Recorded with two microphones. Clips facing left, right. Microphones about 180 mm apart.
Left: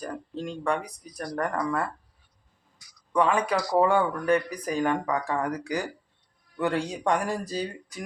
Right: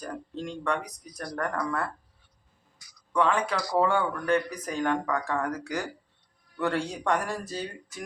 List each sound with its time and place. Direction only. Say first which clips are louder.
0.3 s speech: left 2 dB; 10° left (ahead or behind)
3.1 s speech: left 2 dB; 10° left (ahead or behind)